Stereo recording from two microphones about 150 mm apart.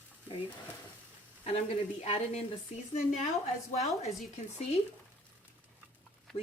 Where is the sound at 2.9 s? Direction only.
50° left (ahead or behind).